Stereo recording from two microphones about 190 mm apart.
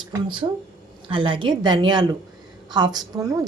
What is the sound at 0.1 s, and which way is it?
A woman's voice, 25° right (ahead or behind).